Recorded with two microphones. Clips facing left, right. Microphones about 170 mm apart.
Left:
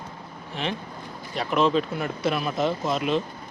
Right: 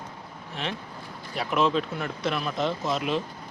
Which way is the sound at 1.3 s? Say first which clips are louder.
Left 2 dB; 5° right (ahead or behind).